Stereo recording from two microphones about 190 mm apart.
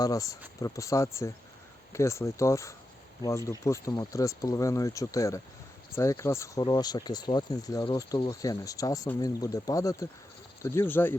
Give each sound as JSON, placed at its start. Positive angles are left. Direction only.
{"t": 0.0, "sound": "speech", "side_deg": 20}